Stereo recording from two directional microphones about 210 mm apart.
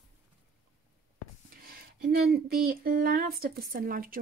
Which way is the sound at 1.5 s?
45° right (ahead or behind).